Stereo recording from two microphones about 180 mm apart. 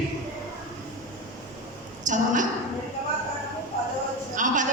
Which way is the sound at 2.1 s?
45° right (ahead or behind).